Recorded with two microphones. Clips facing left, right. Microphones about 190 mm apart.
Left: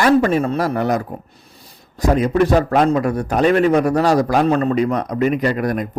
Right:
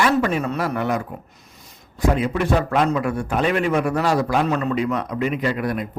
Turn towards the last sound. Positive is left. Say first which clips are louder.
# left 4 dB
turn(degrees=45)  # may be behind; listen again after turning